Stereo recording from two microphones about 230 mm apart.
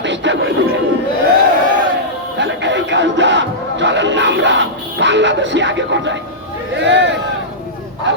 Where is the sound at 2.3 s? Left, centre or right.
Right.